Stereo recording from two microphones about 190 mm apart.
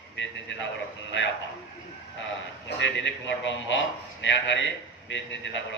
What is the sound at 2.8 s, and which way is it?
A man's voice, 70° left (ahead or behind).